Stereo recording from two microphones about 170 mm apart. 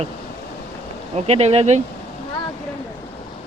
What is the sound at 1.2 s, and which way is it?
Speech, 40° right (ahead or behind).